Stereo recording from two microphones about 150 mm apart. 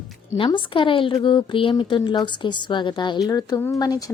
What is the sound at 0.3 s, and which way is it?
A woman's voice, 35° left (ahead or behind).